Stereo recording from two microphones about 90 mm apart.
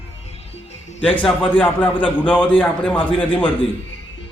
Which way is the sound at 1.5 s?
15° left (ahead or behind).